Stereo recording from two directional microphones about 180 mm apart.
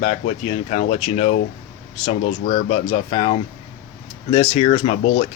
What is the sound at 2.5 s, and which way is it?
Speech, 30° left (ahead or behind).